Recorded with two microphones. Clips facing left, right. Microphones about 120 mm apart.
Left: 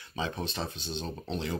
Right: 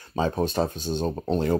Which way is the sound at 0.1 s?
45° right (ahead or behind).